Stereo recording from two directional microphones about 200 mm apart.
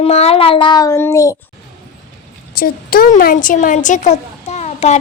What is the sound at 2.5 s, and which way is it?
A woman's voice, 50° left (ahead or behind).